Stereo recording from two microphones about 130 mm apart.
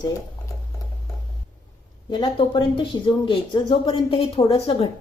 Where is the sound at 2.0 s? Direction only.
35° left (ahead or behind).